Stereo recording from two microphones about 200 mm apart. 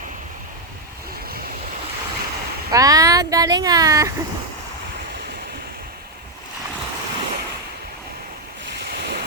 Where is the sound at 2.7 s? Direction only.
15° right (ahead or behind).